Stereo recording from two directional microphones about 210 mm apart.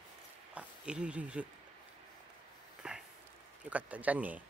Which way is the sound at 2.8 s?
5° right (ahead or behind).